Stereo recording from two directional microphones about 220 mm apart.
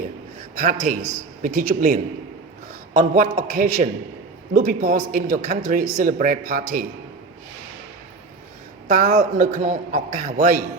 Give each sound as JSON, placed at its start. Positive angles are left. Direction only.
{"t": 0.5, "sound": "a man's voice", "side_deg": -40}
{"t": 8.9, "sound": "a man's voice", "side_deg": -35}